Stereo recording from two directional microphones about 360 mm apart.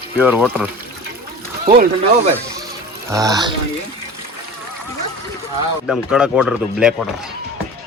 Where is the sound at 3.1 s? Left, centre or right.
Centre.